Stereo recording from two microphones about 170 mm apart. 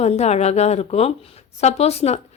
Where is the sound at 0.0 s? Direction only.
40° left (ahead or behind).